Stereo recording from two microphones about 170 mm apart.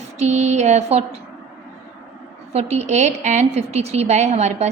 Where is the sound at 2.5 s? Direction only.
40° right (ahead or behind).